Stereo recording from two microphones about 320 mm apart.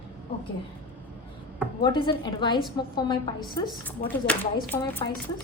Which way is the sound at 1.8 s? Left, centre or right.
Centre.